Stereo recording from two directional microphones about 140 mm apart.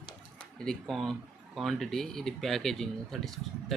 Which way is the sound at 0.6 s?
Centre (ahead or behind).